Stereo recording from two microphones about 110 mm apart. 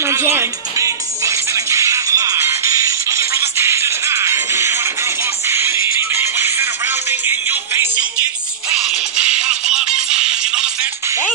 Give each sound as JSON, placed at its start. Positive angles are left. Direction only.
{"t": 0.0, "sound": "music", "side_deg": -25}
{"t": 8.7, "sound": "music", "side_deg": -10}